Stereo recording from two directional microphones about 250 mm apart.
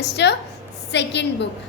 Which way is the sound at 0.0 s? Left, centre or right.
Left.